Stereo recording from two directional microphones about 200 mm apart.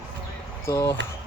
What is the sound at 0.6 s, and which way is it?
Speech, 15° left (ahead or behind).